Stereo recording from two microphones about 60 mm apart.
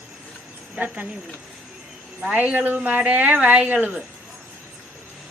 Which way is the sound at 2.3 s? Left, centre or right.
Right.